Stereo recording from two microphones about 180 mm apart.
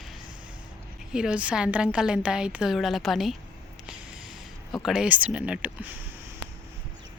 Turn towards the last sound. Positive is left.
turn(degrees=-5)  # may be behind; listen again after turning